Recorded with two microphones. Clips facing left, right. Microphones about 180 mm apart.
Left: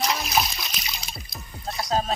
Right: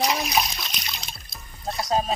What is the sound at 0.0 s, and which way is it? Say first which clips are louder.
Music: right 1 dB; centre (ahead or behind).